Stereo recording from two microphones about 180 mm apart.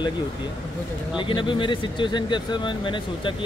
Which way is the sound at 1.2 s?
25° left (ahead or behind).